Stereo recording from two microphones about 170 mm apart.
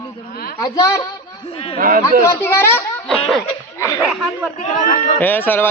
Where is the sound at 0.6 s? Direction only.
20° left (ahead or behind).